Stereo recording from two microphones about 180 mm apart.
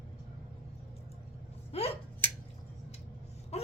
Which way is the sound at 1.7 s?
35° left (ahead or behind).